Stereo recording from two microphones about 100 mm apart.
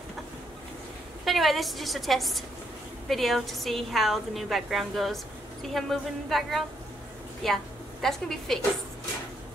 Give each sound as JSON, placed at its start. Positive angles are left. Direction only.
{"t": 1.2, "sound": "a woman's voice", "side_deg": 0}